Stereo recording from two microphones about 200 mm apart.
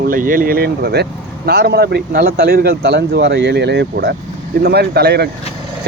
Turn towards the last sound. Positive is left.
turn(degrees=-55)  # may be behind; listen again after turning